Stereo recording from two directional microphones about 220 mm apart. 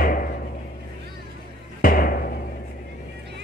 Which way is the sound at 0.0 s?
40° left (ahead or behind).